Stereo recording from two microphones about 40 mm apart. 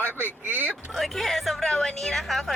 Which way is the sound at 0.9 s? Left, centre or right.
Centre.